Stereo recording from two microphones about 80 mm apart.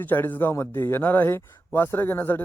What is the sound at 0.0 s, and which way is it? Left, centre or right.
A man's voice, left.